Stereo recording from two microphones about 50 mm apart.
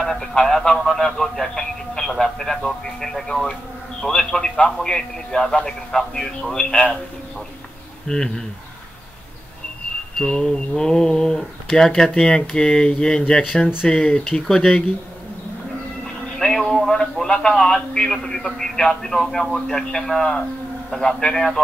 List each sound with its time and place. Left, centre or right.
0.0 s a sound: centre
0.7 s a man's voice: centre
8.1 s a man's voice: centre
10.1 s a man's voice: centre
16.3 s a man's voice: centre